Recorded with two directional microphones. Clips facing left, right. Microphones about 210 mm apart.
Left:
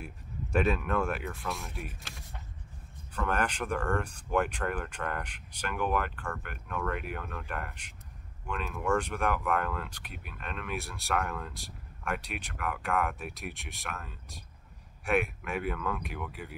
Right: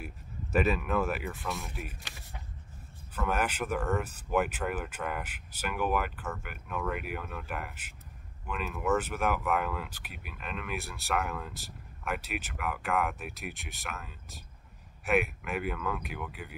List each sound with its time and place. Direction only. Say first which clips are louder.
0.0 s speech: left 1 dB; 5° right (ahead or behind)